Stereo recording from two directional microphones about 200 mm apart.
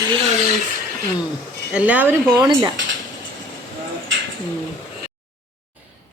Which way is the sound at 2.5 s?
25° right (ahead or behind).